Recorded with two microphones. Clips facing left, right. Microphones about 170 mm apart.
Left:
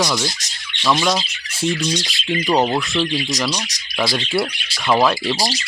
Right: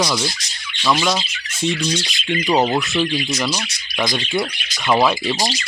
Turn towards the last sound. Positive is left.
turn(degrees=0)  # may be behind; listen again after turning